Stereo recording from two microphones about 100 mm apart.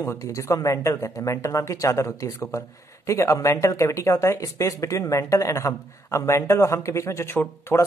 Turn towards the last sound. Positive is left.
turn(degrees=25)  # may be behind; listen again after turning